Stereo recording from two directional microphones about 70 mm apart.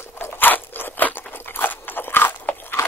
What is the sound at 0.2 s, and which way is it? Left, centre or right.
Crunch, left.